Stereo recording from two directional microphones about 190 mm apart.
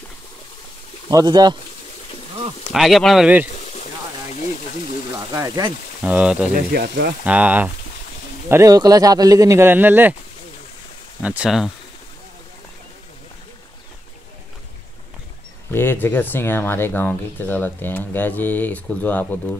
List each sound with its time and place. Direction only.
1.1 s speech: 20° right (ahead or behind)
2.7 s speech: centre (ahead or behind)
3.5 s water: 35° left (ahead or behind)
5.3 s speech: 15° right (ahead or behind)
6.5 s speech: 55° right (ahead or behind)
7.2 s speech: 10° right (ahead or behind)
11.2 s speech: 5° right (ahead or behind)
15.7 s speech: 10° left (ahead or behind)